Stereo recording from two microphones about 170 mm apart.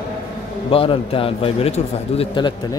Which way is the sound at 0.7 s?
35° left (ahead or behind).